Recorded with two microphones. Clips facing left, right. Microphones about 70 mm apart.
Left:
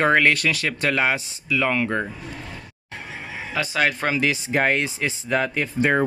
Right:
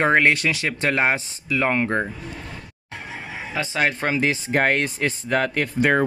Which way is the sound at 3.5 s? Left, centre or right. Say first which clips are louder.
Left 1 dB; right.